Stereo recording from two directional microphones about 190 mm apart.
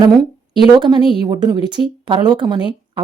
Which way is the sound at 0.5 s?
25° right (ahead or behind).